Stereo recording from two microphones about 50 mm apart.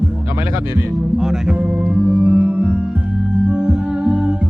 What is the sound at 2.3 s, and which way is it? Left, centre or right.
Music, right.